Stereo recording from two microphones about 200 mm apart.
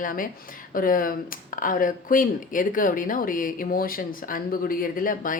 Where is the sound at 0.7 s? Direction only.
45° left (ahead or behind).